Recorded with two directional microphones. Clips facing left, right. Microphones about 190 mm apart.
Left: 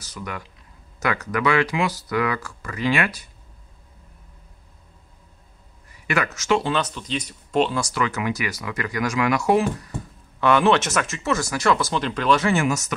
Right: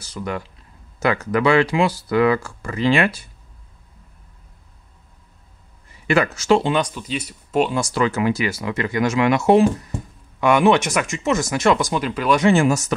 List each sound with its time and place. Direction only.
0.0 s speech: 30° right (ahead or behind)
6.0 s speech: 30° right (ahead or behind)
6.7 s speech: 10° right (ahead or behind)
7.9 s speech: 30° right (ahead or behind)
10.4 s speech: 15° right (ahead or behind)
12.4 s speech: 30° right (ahead or behind)